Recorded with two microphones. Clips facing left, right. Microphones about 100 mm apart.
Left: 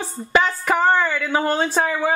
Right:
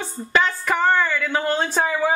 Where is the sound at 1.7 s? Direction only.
Centre (ahead or behind).